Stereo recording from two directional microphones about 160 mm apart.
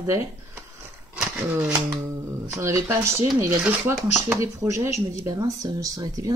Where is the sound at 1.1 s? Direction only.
10° right (ahead or behind).